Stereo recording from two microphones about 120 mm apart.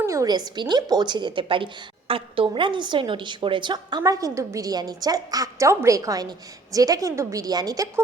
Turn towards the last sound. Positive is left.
turn(degrees=-30)  # may be behind; listen again after turning